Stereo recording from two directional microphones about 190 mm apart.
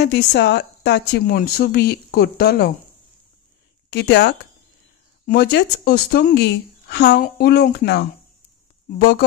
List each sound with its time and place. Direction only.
0.0 s speech: 60° left (ahead or behind)
3.9 s speech: 60° left (ahead or behind)